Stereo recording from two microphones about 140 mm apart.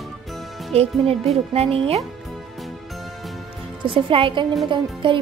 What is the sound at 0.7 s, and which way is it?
Speech, 50° right (ahead or behind).